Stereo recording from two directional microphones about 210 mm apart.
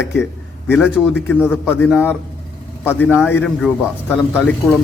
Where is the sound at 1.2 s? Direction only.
10° left (ahead or behind).